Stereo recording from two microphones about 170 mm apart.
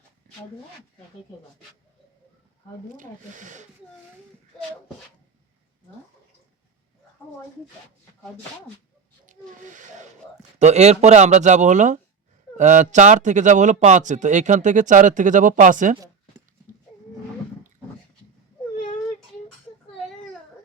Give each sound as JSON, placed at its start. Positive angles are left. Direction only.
{"t": 2.9, "sound": "speech", "side_deg": -50}
{"t": 9.2, "sound": "speech", "side_deg": -50}